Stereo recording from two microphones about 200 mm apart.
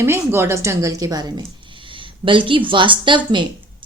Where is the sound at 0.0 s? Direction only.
10° right (ahead or behind).